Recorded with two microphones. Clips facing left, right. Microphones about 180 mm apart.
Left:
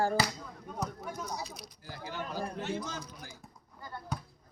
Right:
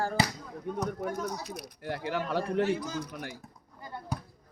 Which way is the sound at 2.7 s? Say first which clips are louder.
Right 5 dB; 10° right (ahead or behind).